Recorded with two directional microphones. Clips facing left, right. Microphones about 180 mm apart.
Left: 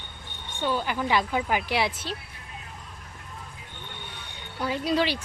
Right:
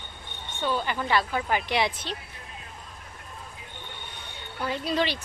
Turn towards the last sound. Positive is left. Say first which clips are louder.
# left 2 dB
turn(degrees=10)  # may be behind; listen again after turning